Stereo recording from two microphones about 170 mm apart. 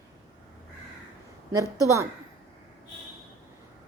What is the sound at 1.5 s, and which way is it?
Speech, 20° right (ahead or behind).